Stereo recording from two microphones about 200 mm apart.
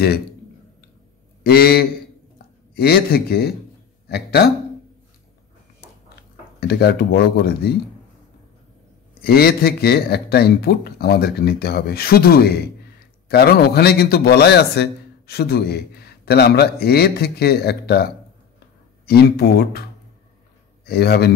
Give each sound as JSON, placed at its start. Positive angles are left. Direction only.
{"t": 1.4, "sound": "a man's voice", "side_deg": 50}
{"t": 6.6, "sound": "a man's voice", "side_deg": 55}
{"t": 9.2, "sound": "a man's voice", "side_deg": 50}
{"t": 20.8, "sound": "a man's voice", "side_deg": 50}